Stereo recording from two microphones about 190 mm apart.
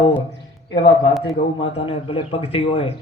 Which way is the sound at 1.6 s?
30° left (ahead or behind).